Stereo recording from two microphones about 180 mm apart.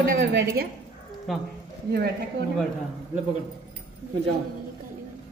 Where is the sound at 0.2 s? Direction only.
70° right (ahead or behind).